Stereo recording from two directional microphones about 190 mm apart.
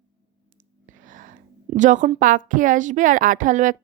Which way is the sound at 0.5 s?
40° right (ahead or behind).